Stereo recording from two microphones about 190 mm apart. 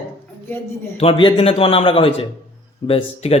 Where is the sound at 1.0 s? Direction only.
30° left (ahead or behind).